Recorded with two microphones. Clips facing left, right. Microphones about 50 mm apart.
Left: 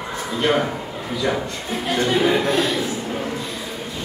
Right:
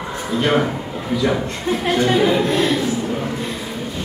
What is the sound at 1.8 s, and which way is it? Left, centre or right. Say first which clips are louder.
Speech: right 3 dB; centre.